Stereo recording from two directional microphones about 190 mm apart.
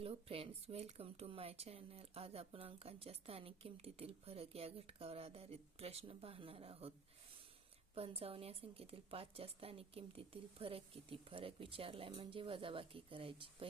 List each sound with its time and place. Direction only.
0.0 s speech: 30° right (ahead or behind)
7.9 s a woman's voice: 30° right (ahead or behind)